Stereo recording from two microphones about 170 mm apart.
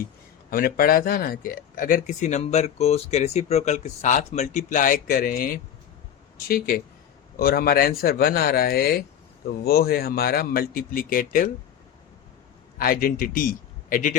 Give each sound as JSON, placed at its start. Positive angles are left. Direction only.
{"t": 0.5, "sound": "speech", "side_deg": 60}
{"t": 12.8, "sound": "a man's voice", "side_deg": 55}